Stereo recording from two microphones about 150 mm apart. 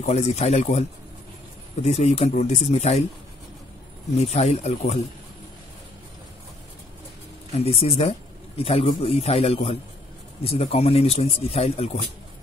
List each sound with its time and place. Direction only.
0.0 s speech: 45° left (ahead or behind)
4.2 s speech: 45° left (ahead or behind)
7.5 s speech: 40° left (ahead or behind)